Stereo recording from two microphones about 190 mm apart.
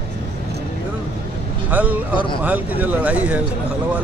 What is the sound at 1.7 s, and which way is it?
Speech, 10° right (ahead or behind).